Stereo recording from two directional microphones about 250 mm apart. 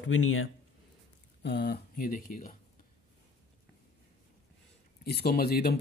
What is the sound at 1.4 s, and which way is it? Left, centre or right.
Speech, left.